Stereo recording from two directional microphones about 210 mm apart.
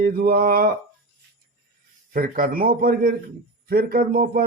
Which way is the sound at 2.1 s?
45° right (ahead or behind).